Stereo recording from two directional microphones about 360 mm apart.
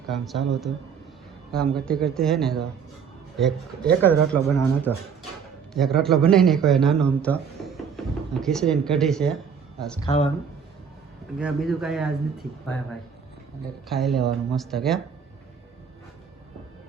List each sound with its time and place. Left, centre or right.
0.1 s speech: centre
1.5 s speech: centre
10.1 s speech: centre
11.3 s speech: centre
13.9 s speech: centre